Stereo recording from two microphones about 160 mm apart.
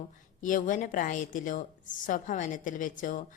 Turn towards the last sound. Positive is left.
turn(degrees=55)  # may be behind; listen again after turning